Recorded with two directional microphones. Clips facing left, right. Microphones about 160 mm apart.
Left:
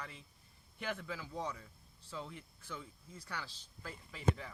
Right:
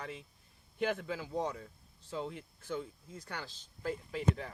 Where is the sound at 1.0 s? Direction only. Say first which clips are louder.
Right 6 dB; 50° right (ahead or behind).